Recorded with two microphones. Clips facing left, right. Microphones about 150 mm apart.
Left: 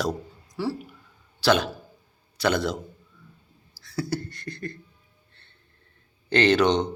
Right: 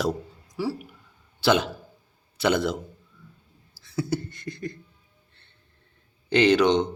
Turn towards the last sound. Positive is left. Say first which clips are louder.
# right 1 dB
turn(degrees=-15)  # may be behind; listen again after turning